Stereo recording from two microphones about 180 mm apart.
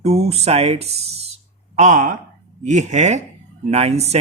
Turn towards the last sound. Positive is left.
turn(degrees=-35)  # may be behind; listen again after turning